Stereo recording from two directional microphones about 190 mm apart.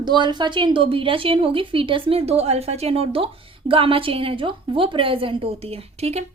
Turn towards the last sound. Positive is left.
turn(degrees=-35)  # may be behind; listen again after turning